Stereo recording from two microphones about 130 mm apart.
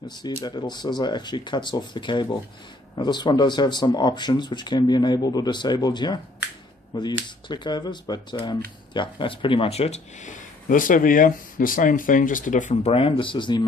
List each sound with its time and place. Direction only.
0.1 s speech: 35° left (ahead or behind); by 12.7 s 80° left
12.8 s speech: 45° left (ahead or behind)